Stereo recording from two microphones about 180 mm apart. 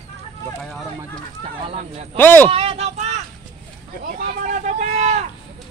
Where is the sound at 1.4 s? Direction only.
35° right (ahead or behind).